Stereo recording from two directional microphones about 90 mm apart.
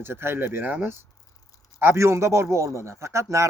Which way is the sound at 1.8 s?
30° right (ahead or behind).